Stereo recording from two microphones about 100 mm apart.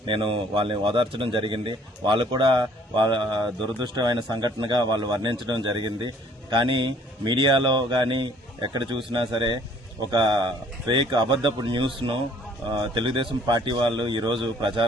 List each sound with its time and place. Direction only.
0.0 s speech: 55° right (ahead or behind)